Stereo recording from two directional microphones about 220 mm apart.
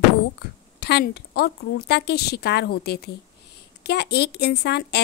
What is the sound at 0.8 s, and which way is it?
A woman's voice, 45° left (ahead or behind).